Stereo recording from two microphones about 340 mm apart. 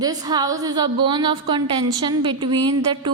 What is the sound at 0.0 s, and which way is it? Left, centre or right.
A woman's voice, centre.